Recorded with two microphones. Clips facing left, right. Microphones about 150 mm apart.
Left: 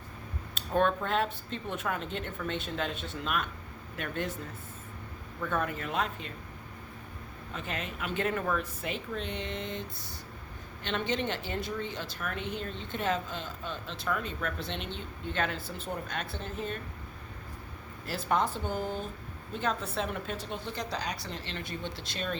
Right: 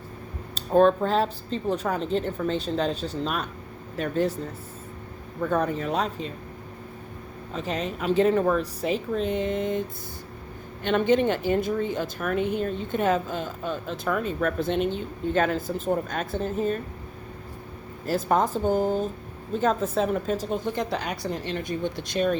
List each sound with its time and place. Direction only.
0.5 s speech: 35° right (ahead or behind)
5.4 s speech: 40° right (ahead or behind)
7.5 s speech: 40° right (ahead or behind)
10.8 s speech: 50° right (ahead or behind)
18.0 s speech: 40° right (ahead or behind)